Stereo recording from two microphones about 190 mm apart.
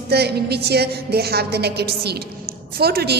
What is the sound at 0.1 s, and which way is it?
Mantra, 60° right (ahead or behind).